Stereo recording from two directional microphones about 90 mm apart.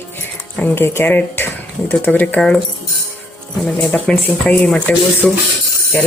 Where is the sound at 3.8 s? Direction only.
10° left (ahead or behind).